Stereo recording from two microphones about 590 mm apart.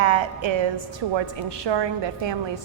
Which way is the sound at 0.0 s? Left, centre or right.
Right.